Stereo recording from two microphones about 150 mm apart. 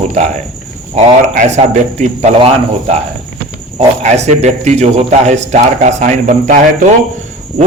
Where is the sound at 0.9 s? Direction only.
45° right (ahead or behind).